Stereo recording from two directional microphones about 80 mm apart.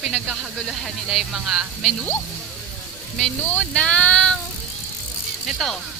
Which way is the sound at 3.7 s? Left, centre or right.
Centre.